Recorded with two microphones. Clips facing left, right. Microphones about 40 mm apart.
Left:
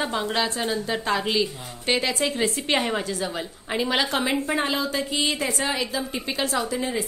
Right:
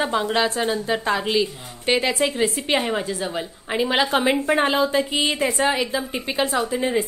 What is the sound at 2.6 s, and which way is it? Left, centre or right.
A woman's voice, centre.